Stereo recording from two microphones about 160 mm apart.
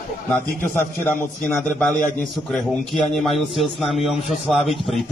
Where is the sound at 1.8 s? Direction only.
5° left (ahead or behind).